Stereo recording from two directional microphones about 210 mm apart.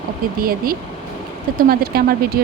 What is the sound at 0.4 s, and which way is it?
Speech, 45° right (ahead or behind).